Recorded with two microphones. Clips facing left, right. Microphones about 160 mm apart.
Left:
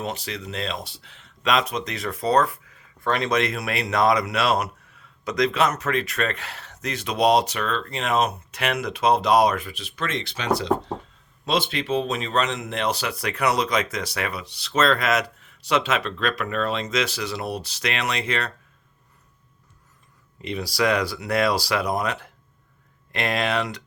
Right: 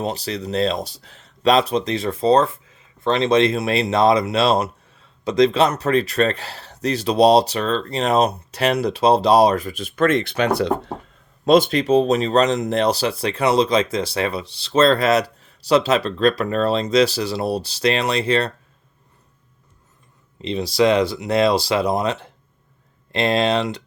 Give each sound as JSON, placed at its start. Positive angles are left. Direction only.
{"t": 0.0, "sound": "speech", "side_deg": -35}
{"t": 11.4, "sound": "speech", "side_deg": -45}
{"t": 20.4, "sound": "speech", "side_deg": -25}